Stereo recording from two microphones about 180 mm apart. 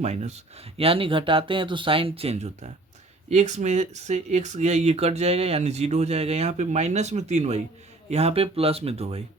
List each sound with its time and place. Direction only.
0.0 s speech: 40° right (ahead or behind)